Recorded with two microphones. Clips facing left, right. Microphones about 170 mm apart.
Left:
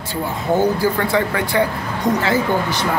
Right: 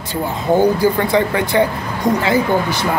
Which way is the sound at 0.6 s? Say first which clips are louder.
Right 4 dB; 20° right (ahead or behind).